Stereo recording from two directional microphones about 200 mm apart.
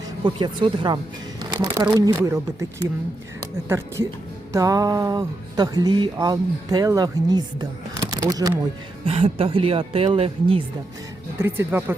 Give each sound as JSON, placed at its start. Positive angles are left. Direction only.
{"t": 0.3, "sound": "speech", "side_deg": -25}
{"t": 1.4, "sound": "shuffling cards", "side_deg": -20}
{"t": 2.0, "sound": "speech", "side_deg": -15}
{"t": 9.0, "sound": "speech", "side_deg": -30}
{"t": 11.3, "sound": "speech", "side_deg": -10}